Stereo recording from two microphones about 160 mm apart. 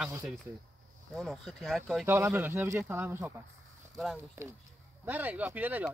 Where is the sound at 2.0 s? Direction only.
15° right (ahead or behind).